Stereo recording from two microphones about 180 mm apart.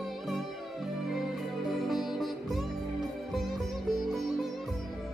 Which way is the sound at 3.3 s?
Centre (ahead or behind).